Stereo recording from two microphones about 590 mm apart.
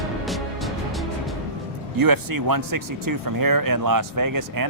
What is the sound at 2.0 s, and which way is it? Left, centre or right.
Speech, right.